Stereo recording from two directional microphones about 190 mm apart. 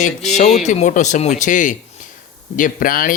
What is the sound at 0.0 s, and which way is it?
Speech, 40° left (ahead or behind).